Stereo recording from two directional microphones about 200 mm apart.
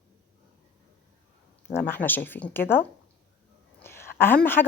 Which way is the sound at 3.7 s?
10° left (ahead or behind).